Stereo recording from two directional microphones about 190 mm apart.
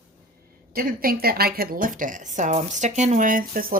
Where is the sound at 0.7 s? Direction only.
50° right (ahead or behind).